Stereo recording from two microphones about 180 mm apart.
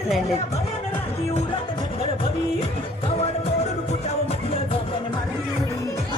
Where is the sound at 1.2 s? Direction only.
35° left (ahead or behind).